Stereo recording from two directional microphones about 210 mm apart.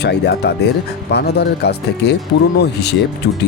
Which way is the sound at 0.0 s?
55° left (ahead or behind).